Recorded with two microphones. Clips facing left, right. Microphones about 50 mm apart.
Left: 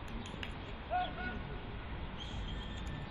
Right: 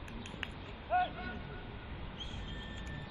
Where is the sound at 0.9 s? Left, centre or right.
Right.